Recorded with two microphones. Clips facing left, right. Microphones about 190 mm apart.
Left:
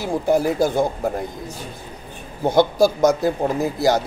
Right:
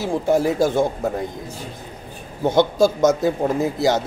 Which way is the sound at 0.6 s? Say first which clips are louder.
Right 1 dB; 25° right (ahead or behind).